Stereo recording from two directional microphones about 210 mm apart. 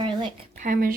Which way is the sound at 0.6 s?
40° right (ahead or behind).